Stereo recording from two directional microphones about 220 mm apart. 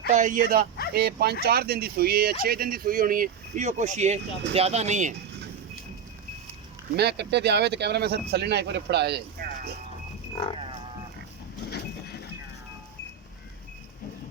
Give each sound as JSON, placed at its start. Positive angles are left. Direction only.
{"t": 0.1, "sound": "speech", "side_deg": -35}
{"t": 6.9, "sound": "speech", "side_deg": -50}
{"t": 10.3, "sound": "livestock", "side_deg": 25}
{"t": 11.7, "sound": "vehicle", "side_deg": 50}